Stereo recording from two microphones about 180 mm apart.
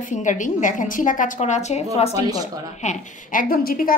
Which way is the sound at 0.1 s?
45° left (ahead or behind).